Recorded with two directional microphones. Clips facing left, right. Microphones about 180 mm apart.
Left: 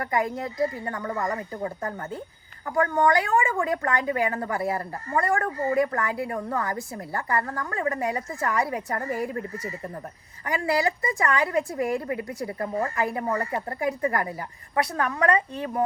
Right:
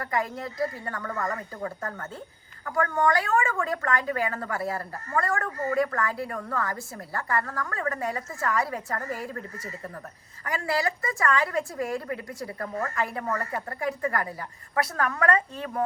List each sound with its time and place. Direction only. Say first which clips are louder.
0.0 s a woman's voice: left 3 dB; 20° left (ahead or behind)